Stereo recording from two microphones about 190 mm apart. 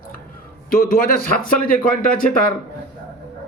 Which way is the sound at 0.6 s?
50° left (ahead or behind).